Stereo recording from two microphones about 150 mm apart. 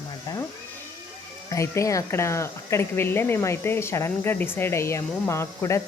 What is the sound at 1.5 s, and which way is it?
Speech, 20° left (ahead or behind).